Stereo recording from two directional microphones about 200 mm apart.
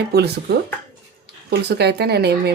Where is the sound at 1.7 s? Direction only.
55° right (ahead or behind).